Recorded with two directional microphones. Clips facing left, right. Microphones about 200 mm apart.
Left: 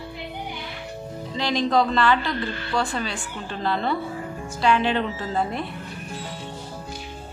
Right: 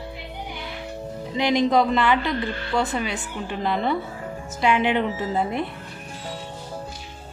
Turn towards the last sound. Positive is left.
turn(degrees=-20)  # may be behind; listen again after turning